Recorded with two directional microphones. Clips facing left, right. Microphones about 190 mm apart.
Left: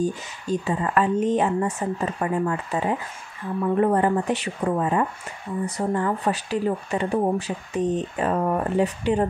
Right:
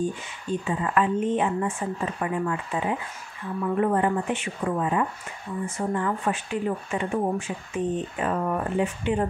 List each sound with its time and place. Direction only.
0.0 s speech: 40° left (ahead or behind)